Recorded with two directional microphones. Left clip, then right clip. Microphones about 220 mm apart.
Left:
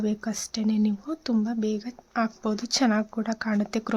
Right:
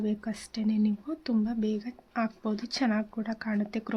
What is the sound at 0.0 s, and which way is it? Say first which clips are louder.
Speech: left 4 dB; 25° left (ahead or behind).